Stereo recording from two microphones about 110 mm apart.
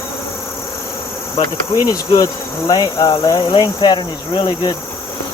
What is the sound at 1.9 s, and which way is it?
Speech, 35° left (ahead or behind).